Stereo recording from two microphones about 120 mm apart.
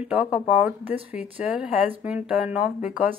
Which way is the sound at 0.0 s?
10° right (ahead or behind).